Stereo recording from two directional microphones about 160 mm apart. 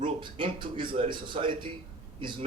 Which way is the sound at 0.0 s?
30° right (ahead or behind).